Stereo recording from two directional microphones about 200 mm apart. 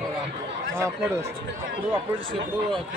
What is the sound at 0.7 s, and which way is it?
Speech, 15° right (ahead or behind).